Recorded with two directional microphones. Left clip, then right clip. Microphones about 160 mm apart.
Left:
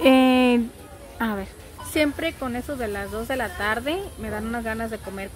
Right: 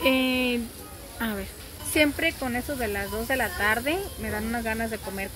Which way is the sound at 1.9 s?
15° left (ahead or behind).